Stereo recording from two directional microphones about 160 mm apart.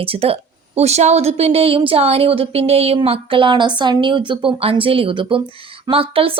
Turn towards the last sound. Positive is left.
turn(degrees=-35)  # may be behind; listen again after turning